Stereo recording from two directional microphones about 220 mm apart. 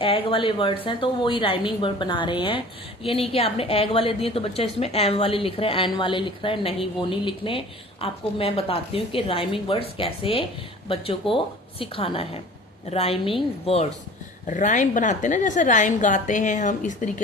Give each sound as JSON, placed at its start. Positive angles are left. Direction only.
{"t": 0.0, "sound": "a woman's voice", "side_deg": 25}